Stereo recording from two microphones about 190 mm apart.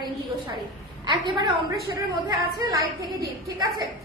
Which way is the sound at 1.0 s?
25° right (ahead or behind).